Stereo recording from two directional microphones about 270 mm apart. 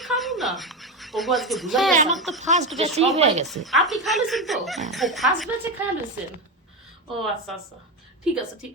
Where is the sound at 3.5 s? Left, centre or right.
Centre.